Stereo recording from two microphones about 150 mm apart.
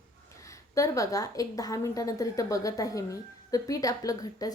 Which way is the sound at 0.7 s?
20° left (ahead or behind).